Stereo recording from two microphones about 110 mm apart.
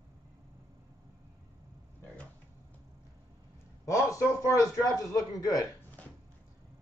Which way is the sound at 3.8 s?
30° left (ahead or behind).